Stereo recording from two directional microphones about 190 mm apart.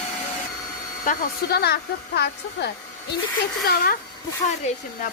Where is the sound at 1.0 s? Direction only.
50° left (ahead or behind).